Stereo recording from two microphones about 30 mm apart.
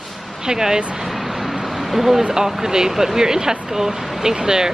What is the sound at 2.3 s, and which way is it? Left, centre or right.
Speech, centre.